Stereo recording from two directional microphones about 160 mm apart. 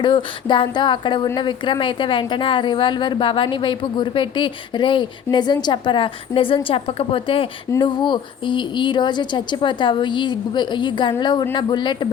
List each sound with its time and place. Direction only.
0.0 s a woman's voice: 30° left (ahead or behind)